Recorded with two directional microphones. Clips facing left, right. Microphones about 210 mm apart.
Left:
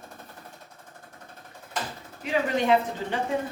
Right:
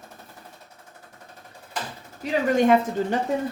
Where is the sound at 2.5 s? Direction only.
45° right (ahead or behind).